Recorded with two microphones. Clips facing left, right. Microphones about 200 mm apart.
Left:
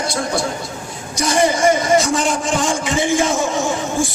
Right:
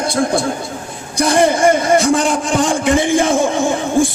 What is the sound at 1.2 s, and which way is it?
A man's voice, 55° right (ahead or behind).